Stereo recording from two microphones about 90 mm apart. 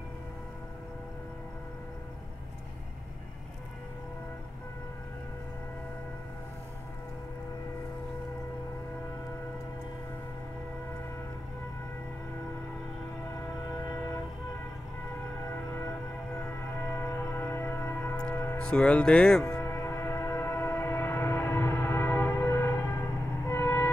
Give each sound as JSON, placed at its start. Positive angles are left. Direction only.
{"t": 16.8, "sound": "music", "side_deg": 25}
{"t": 18.6, "sound": "speech", "side_deg": 10}
{"t": 19.6, "sound": "music", "side_deg": 25}
{"t": 23.4, "sound": "a sound", "side_deg": 25}